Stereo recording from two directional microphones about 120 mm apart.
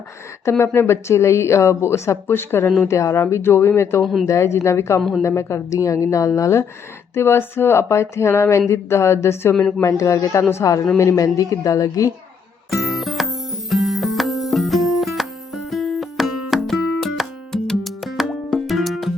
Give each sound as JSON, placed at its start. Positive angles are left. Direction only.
{"t": 0.4, "sound": "speech", "side_deg": 20}
{"t": 4.0, "sound": "speech", "side_deg": 0}
{"t": 4.3, "sound": "speech", "side_deg": 25}
{"t": 4.9, "sound": "speech", "side_deg": 0}
{"t": 5.2, "sound": "speech", "side_deg": 25}
{"t": 9.6, "sound": "speech", "side_deg": 5}
{"t": 9.8, "sound": "speech", "side_deg": 25}
{"t": 12.7, "sound": "music", "side_deg": 0}